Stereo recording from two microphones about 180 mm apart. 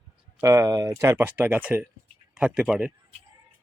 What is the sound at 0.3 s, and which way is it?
Speech, 15° right (ahead or behind).